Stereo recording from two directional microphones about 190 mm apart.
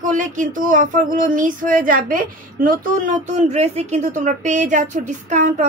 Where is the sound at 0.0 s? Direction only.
45° right (ahead or behind).